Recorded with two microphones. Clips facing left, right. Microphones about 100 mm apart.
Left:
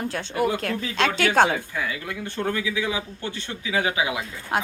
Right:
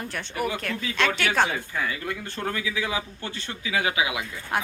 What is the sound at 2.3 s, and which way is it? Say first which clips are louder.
Speech: left 5 dB; 20° left (ahead or behind).